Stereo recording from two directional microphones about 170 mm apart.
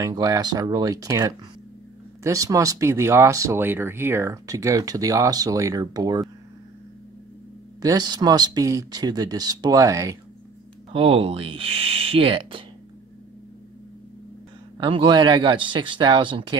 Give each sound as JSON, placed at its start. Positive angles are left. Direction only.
{"t": 0.0, "sound": "speech", "side_deg": -20}
{"t": 7.8, "sound": "speech", "side_deg": -25}
{"t": 10.9, "sound": "speech", "side_deg": -35}
{"t": 14.8, "sound": "speech", "side_deg": -30}